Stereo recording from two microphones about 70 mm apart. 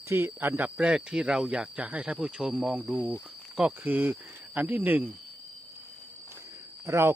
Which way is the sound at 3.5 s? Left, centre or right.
Right.